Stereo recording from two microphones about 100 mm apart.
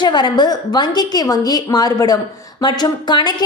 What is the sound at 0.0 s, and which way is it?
A woman's voice, 45° left (ahead or behind).